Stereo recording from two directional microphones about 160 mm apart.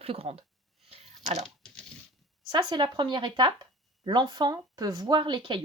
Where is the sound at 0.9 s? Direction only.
40° right (ahead or behind).